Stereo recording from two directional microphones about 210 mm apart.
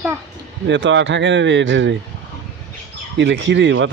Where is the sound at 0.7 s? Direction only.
60° right (ahead or behind).